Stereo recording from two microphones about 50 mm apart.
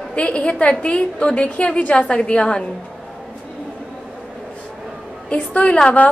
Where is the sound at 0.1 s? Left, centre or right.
Left.